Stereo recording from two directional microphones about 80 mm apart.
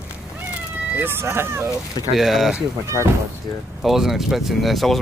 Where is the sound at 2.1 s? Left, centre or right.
Centre.